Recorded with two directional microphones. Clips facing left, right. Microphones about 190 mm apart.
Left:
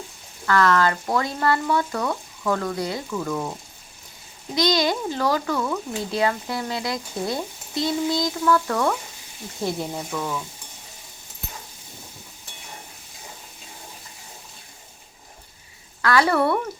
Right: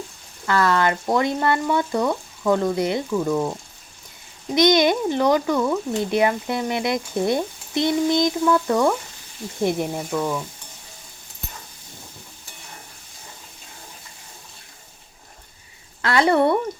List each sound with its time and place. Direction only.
0.4 s speech: 20° right (ahead or behind)
4.5 s speech: 20° right (ahead or behind)
16.0 s a woman's voice: 25° right (ahead or behind)